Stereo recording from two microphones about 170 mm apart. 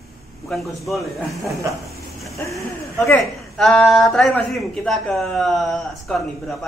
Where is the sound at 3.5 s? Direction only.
5° left (ahead or behind).